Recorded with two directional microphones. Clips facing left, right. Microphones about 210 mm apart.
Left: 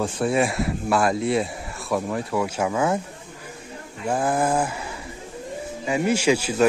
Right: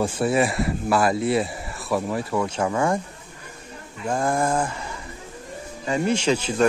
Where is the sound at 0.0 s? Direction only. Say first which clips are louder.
Right 1 dB; 5° right (ahead or behind).